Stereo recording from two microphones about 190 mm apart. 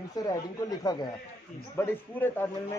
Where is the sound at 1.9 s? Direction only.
10° left (ahead or behind).